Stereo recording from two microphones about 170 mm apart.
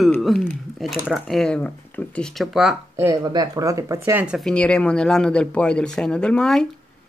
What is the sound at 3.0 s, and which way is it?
Speech, 20° right (ahead or behind).